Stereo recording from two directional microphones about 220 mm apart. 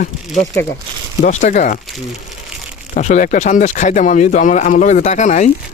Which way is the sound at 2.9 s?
35° left (ahead or behind).